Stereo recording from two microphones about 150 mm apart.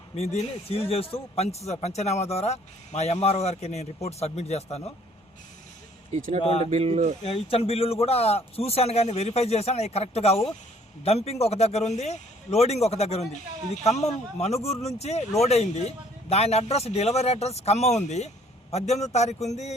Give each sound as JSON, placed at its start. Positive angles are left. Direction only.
{"t": 0.2, "sound": "a man's voice", "side_deg": 40}
{"t": 6.1, "sound": "speech", "side_deg": -50}
{"t": 6.4, "sound": "a man's voice", "side_deg": 40}
{"t": 6.7, "sound": "speech", "side_deg": -50}
{"t": 7.3, "sound": "a man's voice", "side_deg": 40}